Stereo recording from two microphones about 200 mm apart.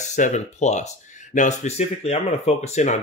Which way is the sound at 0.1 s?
35° left (ahead or behind).